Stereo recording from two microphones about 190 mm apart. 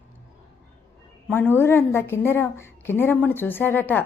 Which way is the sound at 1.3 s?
10° left (ahead or behind).